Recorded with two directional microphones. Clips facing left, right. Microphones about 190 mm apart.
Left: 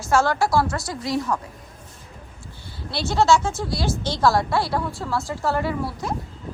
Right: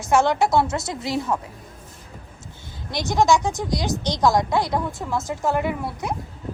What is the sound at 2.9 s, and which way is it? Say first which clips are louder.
A woman's voice: even; 15° right (ahead or behind).